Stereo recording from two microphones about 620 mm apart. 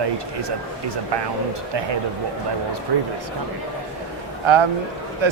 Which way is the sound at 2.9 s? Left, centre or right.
Right.